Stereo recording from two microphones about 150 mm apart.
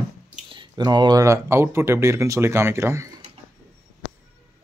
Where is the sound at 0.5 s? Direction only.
30° right (ahead or behind).